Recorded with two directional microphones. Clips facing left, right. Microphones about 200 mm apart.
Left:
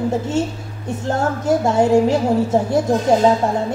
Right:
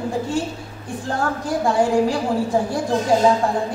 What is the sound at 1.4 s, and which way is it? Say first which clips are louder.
A woman's voice: left 3 dB; 25° left (ahead or behind).